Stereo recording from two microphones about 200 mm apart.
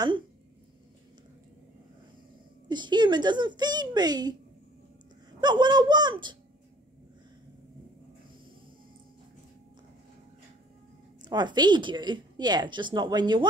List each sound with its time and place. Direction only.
2.7 s a woman's voice: 20° right (ahead or behind)
5.4 s a woman's voice: 20° right (ahead or behind)
11.2 s a woman's voice: 20° right (ahead or behind)